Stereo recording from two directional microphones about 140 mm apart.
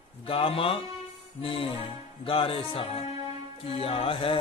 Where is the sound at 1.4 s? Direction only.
40° left (ahead or behind).